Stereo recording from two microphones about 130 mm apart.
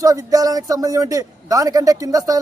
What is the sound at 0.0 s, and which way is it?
A man's voice, 25° right (ahead or behind).